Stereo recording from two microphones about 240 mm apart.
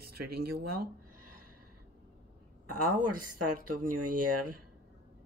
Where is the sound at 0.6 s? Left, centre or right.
Right.